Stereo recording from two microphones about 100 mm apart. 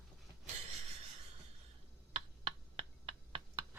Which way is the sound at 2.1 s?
70° right (ahead or behind).